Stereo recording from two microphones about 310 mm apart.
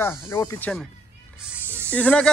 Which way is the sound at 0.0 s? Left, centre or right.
Centre.